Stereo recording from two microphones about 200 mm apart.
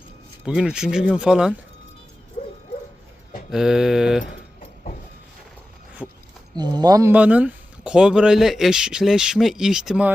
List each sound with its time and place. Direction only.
0.4 s speech: 5° right (ahead or behind)
2.4 s dog: 40° left (ahead or behind)
3.5 s speech: centre (ahead or behind)
6.0 s speech: 5° right (ahead or behind)
6.6 s speech: 20° right (ahead or behind); by 10.1 s centre (ahead or behind)